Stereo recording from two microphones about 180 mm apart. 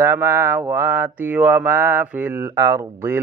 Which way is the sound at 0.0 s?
15° right (ahead or behind).